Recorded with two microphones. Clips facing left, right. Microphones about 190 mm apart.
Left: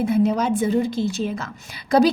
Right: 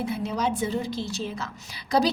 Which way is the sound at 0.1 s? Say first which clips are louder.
Left 8 dB; 50° left (ahead or behind).